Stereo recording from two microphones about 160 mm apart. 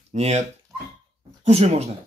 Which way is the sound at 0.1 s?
45° right (ahead or behind).